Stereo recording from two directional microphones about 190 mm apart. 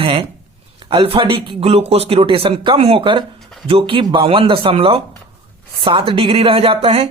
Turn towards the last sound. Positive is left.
turn(degrees=-30)  # may be behind; listen again after turning